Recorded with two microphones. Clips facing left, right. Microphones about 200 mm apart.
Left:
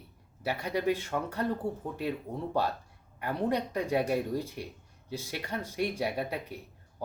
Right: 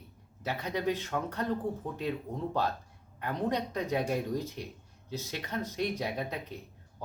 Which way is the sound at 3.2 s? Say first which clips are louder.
Left 2 dB; 10° left (ahead or behind).